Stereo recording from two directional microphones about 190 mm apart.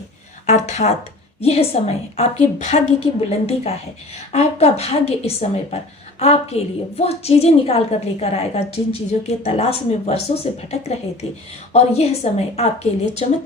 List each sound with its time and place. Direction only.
0.4 s a woman's voice: 35° left (ahead or behind)